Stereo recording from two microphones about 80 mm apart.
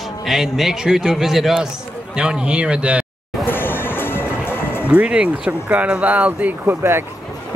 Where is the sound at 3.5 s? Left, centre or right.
Left.